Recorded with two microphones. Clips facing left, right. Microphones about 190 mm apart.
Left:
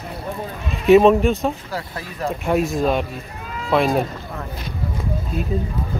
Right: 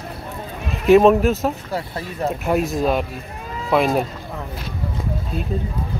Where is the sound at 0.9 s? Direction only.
Centre (ahead or behind).